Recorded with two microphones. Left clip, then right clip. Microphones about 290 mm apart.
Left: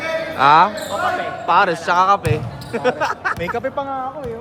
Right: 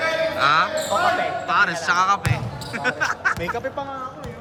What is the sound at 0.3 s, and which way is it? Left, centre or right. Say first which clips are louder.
Speech: left 9 dB; centre.